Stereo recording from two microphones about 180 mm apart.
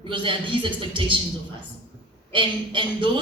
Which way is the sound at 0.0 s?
30° right (ahead or behind).